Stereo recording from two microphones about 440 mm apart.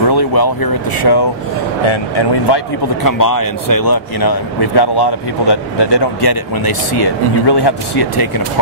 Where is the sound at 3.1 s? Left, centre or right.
Left.